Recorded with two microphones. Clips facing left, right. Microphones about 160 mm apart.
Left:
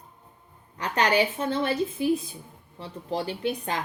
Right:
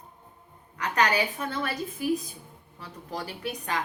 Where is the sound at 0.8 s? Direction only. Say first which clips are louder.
Left 2 dB; 30° left (ahead or behind).